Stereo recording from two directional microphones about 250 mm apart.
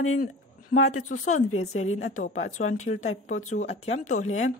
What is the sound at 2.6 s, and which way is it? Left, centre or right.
Speech, left.